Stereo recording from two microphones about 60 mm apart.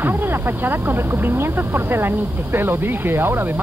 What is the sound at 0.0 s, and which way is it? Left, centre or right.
Speech, right.